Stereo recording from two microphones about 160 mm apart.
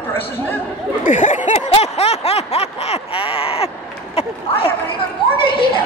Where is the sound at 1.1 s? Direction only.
50° left (ahead or behind).